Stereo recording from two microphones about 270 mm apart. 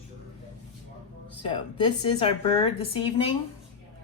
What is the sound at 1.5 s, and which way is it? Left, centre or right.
A woman's voice, centre.